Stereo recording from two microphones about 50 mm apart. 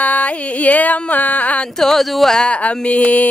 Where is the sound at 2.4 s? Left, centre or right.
Left.